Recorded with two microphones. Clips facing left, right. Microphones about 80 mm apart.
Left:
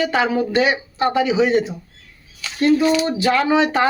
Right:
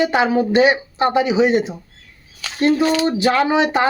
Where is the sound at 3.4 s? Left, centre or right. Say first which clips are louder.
Even; centre.